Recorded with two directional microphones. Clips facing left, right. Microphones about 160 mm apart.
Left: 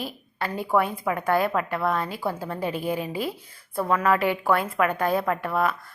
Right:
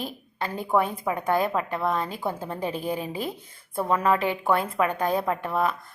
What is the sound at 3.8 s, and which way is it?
A woman's voice, 25° right (ahead or behind).